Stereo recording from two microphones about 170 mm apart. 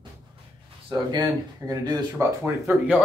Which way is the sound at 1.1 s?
20° right (ahead or behind).